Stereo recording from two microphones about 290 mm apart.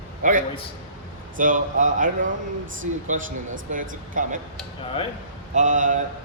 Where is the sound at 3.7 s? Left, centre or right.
Right.